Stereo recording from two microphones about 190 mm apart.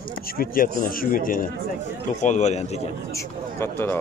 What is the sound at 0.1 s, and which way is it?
A man's voice, 50° left (ahead or behind).